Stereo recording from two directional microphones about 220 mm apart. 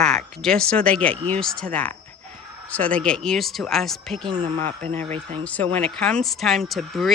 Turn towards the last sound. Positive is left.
turn(degrees=0)  # may be behind; listen again after turning